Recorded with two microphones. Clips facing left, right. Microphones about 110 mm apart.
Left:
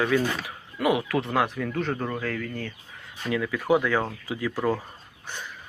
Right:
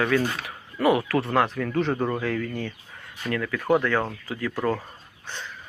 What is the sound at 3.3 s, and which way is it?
Speech, 10° left (ahead or behind).